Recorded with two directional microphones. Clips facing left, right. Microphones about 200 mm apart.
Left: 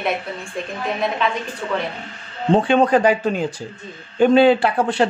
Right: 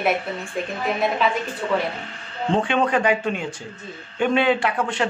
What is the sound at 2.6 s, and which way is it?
Speech, 35° left (ahead or behind).